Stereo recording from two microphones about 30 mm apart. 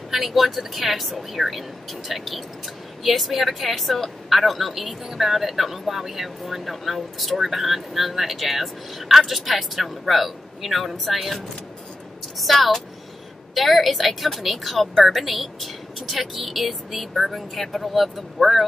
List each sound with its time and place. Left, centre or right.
0.1 s speech: centre
12.4 s speech: centre